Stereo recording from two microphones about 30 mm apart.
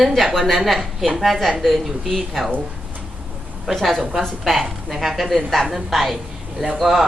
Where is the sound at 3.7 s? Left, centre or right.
Centre.